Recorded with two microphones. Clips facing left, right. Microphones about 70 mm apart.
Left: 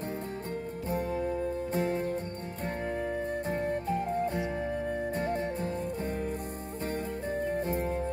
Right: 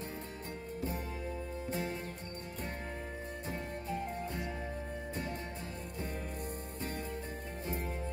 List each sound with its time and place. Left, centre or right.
0.8 s music: left
3.4 s music: left
7.4 s music: left